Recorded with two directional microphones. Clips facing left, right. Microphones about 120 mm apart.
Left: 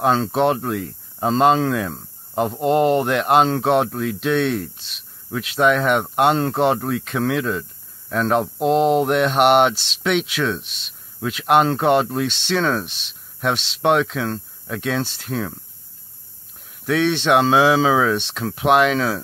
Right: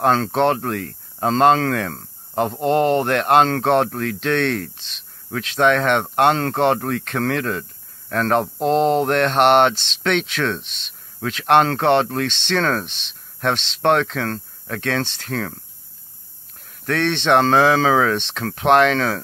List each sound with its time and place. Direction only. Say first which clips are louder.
0.0 s speech: right 1 dB; centre (ahead or behind)
16.8 s speech: left 1 dB; 5° left (ahead or behind)